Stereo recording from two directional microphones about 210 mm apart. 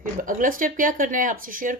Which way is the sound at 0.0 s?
40° right (ahead or behind).